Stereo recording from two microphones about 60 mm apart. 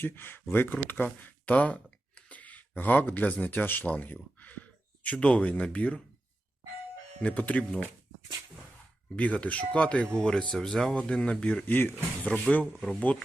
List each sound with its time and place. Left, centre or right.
0.0 s speech: left
7.2 s speech: left
9.1 s speech: left
11.6 s speech: left
12.2 s speech: left
12.7 s speech: centre